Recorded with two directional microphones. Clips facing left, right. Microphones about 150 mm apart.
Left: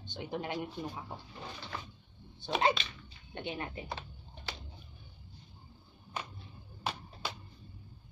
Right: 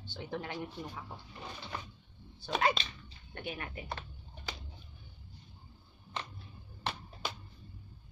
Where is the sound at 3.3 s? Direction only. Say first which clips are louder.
Left 3 dB; 25° left (ahead or behind).